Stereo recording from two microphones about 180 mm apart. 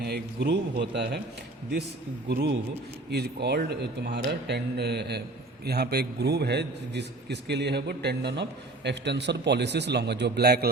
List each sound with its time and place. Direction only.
0.0 s a man's voice: 70° right (ahead or behind)
2.3 s a man's voice: 70° right (ahead or behind)